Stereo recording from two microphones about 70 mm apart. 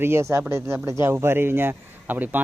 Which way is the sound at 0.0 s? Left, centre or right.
Right.